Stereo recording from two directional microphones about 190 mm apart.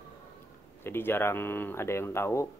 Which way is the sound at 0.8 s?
10° left (ahead or behind).